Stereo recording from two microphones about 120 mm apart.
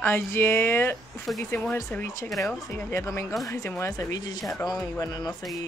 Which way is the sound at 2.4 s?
25° left (ahead or behind).